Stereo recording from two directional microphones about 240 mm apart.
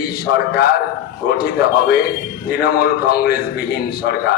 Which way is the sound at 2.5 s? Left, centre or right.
Left.